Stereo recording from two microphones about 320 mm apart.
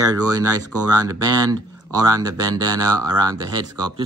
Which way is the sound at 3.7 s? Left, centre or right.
Right.